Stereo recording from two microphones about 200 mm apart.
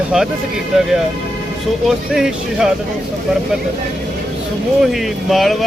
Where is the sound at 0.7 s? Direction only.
Centre (ahead or behind).